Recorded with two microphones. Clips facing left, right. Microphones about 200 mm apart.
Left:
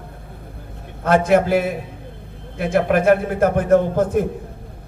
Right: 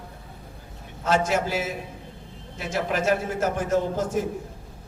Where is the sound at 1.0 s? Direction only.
55° left (ahead or behind).